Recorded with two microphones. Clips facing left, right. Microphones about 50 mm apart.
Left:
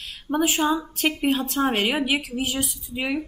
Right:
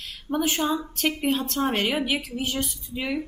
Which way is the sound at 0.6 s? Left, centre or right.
Centre.